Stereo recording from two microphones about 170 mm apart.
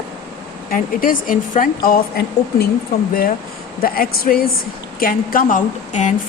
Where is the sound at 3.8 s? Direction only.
60° left (ahead or behind).